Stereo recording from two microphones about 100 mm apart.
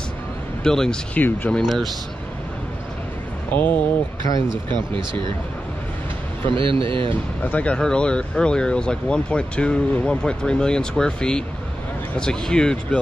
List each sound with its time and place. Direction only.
0.7 s speech: 5° left (ahead or behind)
1.6 s speech: centre (ahead or behind)
3.5 s speech: 15° left (ahead or behind)
4.6 s speech: 55° right (ahead or behind)
6.5 s a man's voice: 60° right (ahead or behind)
7.4 s speech: 15° left (ahead or behind)